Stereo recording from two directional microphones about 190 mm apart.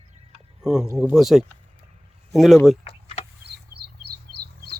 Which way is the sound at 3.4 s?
55° right (ahead or behind).